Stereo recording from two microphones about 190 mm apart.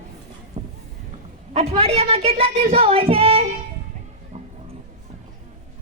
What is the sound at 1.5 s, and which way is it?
Speech, 30° right (ahead or behind).